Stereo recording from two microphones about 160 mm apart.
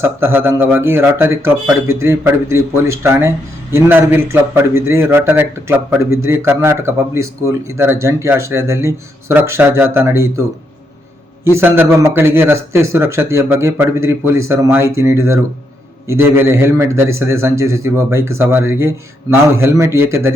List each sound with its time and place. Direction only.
0.0 s a man's voice: 15° right (ahead or behind)
11.5 s a man's voice: 15° right (ahead or behind)